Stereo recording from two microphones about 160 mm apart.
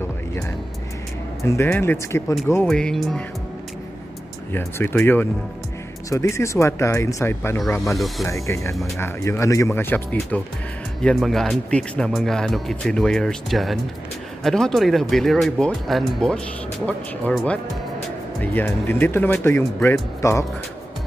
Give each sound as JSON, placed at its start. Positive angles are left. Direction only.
{"t": 1.4, "sound": "speech", "side_deg": 15}
{"t": 4.5, "sound": "speech", "side_deg": 15}
{"t": 7.9, "sound": "speech", "side_deg": 0}
{"t": 8.3, "sound": "speech", "side_deg": 20}
{"t": 8.7, "sound": "speech", "side_deg": 0}
{"t": 9.0, "sound": "speech", "side_deg": 15}